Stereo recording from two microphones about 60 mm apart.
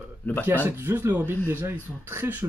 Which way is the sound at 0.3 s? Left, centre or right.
Left.